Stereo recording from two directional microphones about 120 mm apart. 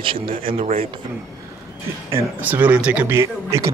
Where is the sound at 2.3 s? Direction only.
15° right (ahead or behind).